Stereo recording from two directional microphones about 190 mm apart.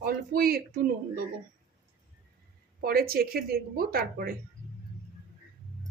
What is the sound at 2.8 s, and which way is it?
A woman's voice, 50° right (ahead or behind).